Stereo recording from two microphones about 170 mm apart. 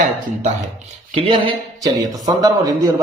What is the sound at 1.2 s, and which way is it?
Speech, 30° right (ahead or behind).